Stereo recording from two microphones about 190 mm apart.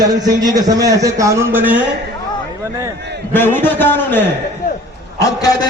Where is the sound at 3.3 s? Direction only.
10° left (ahead or behind).